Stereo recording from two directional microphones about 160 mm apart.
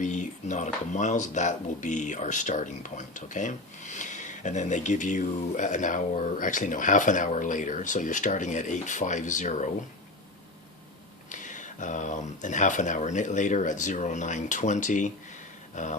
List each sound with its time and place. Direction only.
0.0 s speech: 50° left (ahead or behind)
11.3 s speech: 50° left (ahead or behind)